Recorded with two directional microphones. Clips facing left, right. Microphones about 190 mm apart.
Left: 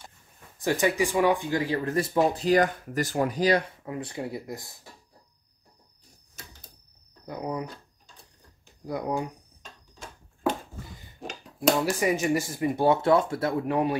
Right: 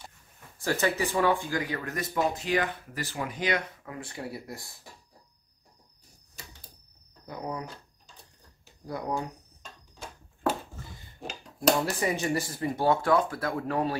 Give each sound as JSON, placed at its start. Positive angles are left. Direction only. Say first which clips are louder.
{"t": 0.6, "sound": "speech", "louder": "left 3 dB", "side_deg": 15}
{"t": 7.2, "sound": "speech", "louder": "left 4 dB", "side_deg": 20}
{"t": 8.8, "sound": "speech", "louder": "left 3 dB", "side_deg": 20}
{"t": 11.1, "sound": "a sound", "louder": "left 2 dB", "side_deg": 0}
{"t": 12.0, "sound": "speech", "louder": "left 4 dB", "side_deg": 15}